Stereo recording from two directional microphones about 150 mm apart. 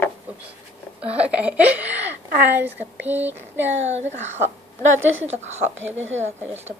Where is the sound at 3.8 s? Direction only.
50° right (ahead or behind).